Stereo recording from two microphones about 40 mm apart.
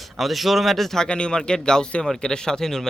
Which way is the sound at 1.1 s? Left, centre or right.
Left.